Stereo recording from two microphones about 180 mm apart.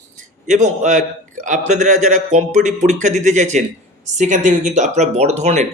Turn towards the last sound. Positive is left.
turn(degrees=-40)  # may be behind; listen again after turning